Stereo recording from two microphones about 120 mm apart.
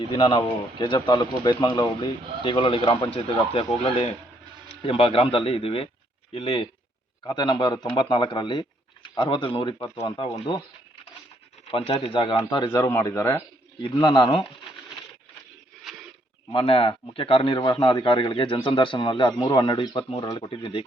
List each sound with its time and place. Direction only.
0.1 s a man's voice: 40° left (ahead or behind)
9.8 s speech: 25° left (ahead or behind)
10.2 s a man's voice: 45° left (ahead or behind)
11.7 s a man's voice: 50° left (ahead or behind)
12.9 s speech: 25° left (ahead or behind)
13.8 s a man's voice: 40° left (ahead or behind)
15.8 s a sound: centre (ahead or behind)
16.5 s a man's voice: 50° left (ahead or behind)